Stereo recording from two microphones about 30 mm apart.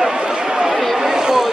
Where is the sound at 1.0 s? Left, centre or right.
Centre.